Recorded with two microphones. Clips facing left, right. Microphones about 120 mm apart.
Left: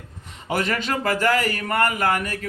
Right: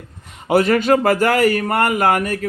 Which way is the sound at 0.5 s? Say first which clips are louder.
Right 10 dB; 45° right (ahead or behind).